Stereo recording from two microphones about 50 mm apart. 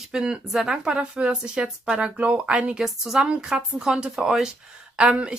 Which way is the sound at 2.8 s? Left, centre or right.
Centre.